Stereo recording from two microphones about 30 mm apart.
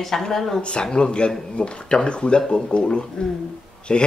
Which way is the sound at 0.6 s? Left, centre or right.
Left.